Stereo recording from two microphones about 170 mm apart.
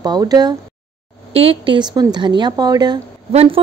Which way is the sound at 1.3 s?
35° right (ahead or behind).